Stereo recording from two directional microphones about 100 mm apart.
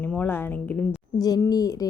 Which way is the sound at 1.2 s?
40° left (ahead or behind).